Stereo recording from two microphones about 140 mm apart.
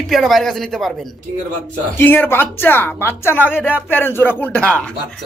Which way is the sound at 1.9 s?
15° left (ahead or behind).